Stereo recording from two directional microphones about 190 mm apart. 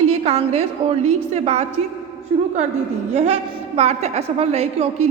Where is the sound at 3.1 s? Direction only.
35° right (ahead or behind).